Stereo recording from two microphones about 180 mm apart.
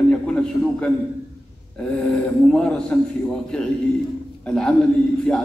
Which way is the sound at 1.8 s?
5° left (ahead or behind).